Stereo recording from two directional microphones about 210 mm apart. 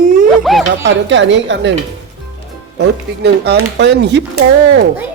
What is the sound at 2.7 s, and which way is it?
Speech, 55° right (ahead or behind).